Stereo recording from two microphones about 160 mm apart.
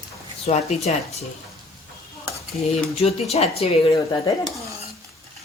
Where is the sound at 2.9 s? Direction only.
40° left (ahead or behind).